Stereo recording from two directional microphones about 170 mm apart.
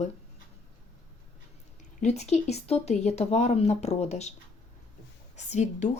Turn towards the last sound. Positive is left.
turn(degrees=45)  # may be behind; listen again after turning